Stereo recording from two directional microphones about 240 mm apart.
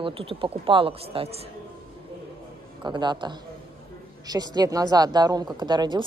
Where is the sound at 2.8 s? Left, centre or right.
Centre.